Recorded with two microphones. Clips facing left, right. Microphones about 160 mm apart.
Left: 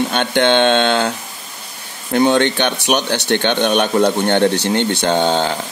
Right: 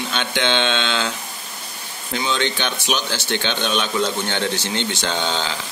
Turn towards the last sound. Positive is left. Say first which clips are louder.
# left 8 dB
turn(degrees=50)  # may be behind; listen again after turning